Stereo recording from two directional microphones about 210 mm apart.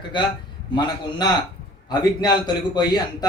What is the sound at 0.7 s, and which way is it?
A man's voice, 20° left (ahead or behind).